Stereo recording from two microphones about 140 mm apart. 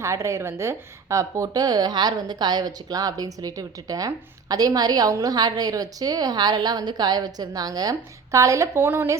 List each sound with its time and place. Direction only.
0.0 s a woman's voice: 20° right (ahead or behind)